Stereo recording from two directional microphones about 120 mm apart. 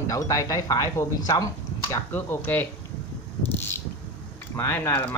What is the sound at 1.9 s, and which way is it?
Speech, 20° left (ahead or behind).